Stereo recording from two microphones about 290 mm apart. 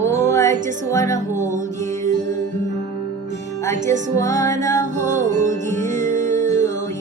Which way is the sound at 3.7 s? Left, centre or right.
Right.